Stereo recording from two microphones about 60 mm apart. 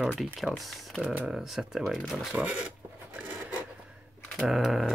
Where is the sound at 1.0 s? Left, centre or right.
Right.